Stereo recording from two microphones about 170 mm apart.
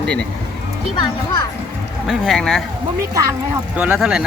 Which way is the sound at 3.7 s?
10° right (ahead or behind).